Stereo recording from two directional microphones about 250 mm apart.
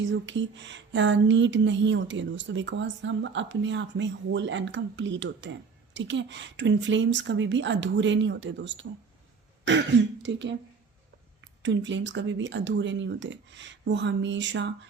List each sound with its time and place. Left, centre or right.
0.0 s speech: right